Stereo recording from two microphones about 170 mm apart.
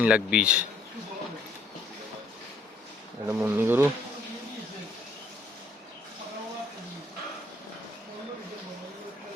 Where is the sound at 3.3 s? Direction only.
10° right (ahead or behind).